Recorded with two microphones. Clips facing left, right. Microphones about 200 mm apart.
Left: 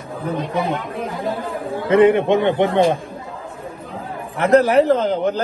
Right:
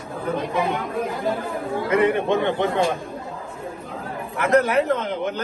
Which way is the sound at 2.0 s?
15° left (ahead or behind).